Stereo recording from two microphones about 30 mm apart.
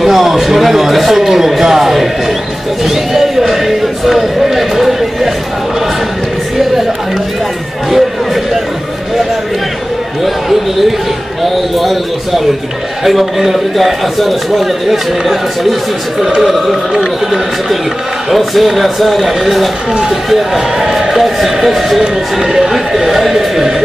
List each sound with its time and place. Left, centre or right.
0.0 s speech: centre
2.8 s a sound: centre
11.4 s speech: centre
16.3 s speech: centre
18.3 s speech: centre